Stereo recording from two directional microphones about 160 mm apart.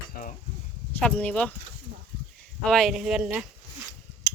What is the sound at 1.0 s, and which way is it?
Speech, 10° left (ahead or behind).